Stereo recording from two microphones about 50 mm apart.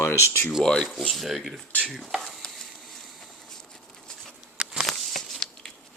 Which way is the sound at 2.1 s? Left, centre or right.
Centre.